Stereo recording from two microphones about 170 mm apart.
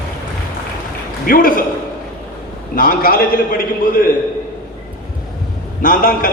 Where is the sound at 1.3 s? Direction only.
55° left (ahead or behind).